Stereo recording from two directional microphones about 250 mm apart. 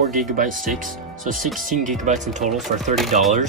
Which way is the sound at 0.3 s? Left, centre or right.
Right.